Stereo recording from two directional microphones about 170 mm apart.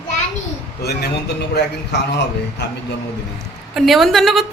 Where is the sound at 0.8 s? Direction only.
75° left (ahead or behind).